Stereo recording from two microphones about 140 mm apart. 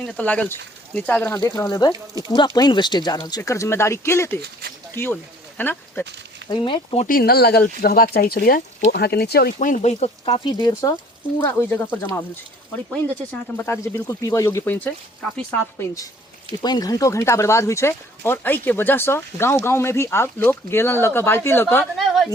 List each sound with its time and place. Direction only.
0.0 s speech: 10° left (ahead or behind)
1.3 s speech: 25° left (ahead or behind)
6.5 s speech: 35° left (ahead or behind)
7.1 s speech: 90° left; by 10.4 s 50° left (ahead or behind)
10.4 s speech: 35° left (ahead or behind)
11.3 s speech: 15° left (ahead or behind)
13.6 s speech: 20° left (ahead or behind)
16.6 s speech: 30° left (ahead or behind)
21.9 s a woman's voice: centre (ahead or behind)